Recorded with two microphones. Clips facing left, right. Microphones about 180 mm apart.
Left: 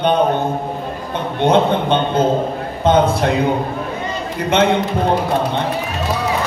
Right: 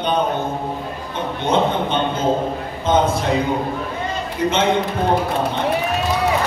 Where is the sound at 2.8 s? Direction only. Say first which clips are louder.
Left 4 dB; 60° left (ahead or behind).